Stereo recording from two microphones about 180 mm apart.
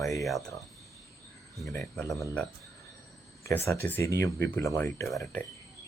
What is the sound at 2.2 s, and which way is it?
Speech, 10° left (ahead or behind).